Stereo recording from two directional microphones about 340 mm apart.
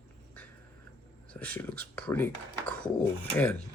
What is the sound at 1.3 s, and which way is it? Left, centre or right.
Speech, centre.